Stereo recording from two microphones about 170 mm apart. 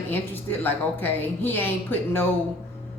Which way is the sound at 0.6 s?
10° left (ahead or behind).